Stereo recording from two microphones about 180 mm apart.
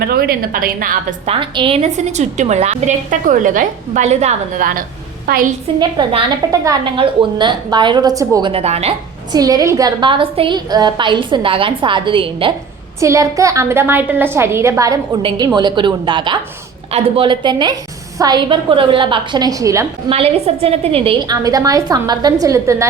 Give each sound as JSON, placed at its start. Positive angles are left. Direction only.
{"t": 0.1, "sound": "a woman's voice", "side_deg": -55}
{"t": 1.3, "sound": "a woman's voice", "side_deg": -30}
{"t": 6.0, "sound": "a woman's voice", "side_deg": -30}
{"t": 9.3, "sound": "a woman's voice", "side_deg": -20}
{"t": 13.0, "sound": "a woman's voice", "side_deg": -15}
{"t": 15.2, "sound": "a woman's voice", "side_deg": -30}
{"t": 20.1, "sound": "a woman's voice", "side_deg": -35}